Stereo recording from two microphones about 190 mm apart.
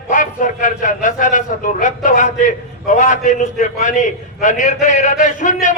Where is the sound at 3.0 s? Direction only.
40° left (ahead or behind).